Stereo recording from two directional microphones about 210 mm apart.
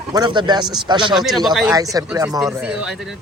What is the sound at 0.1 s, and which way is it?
Speech, 20° right (ahead or behind).